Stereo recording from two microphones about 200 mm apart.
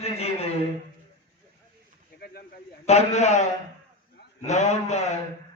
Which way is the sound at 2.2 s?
50° left (ahead or behind).